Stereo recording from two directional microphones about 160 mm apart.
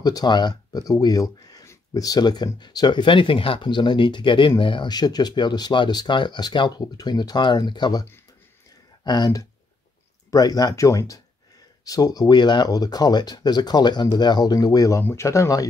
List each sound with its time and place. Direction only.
0.0 s speech: 25° left (ahead or behind)